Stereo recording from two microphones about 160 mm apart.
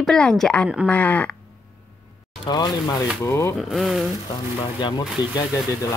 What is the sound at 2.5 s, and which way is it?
A man's voice, 25° left (ahead or behind).